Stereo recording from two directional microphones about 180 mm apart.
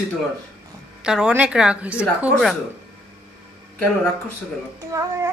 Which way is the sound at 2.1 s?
5° right (ahead or behind).